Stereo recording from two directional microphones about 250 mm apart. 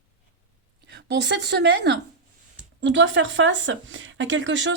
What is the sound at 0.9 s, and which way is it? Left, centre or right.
A woman's voice, right.